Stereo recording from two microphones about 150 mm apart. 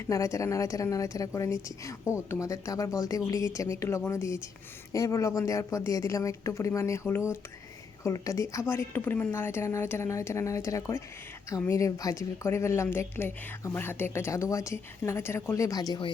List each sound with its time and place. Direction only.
0.0 s a woman's voice: 20° left (ahead or behind)